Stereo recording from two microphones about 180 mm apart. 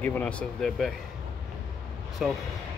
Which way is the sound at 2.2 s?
5° right (ahead or behind).